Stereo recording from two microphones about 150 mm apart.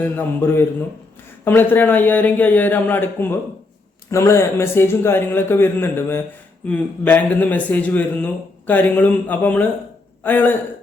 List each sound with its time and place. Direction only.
0.0 s speech: 15° left (ahead or behind)